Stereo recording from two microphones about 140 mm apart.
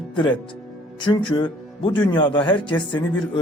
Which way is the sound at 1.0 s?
35° left (ahead or behind).